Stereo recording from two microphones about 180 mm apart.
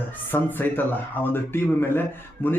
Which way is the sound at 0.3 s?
10° left (ahead or behind).